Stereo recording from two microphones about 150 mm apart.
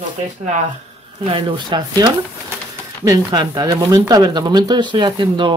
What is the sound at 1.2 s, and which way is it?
Speech, 35° right (ahead or behind).